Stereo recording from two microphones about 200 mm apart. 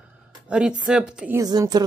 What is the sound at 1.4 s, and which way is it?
Speech, 20° right (ahead or behind).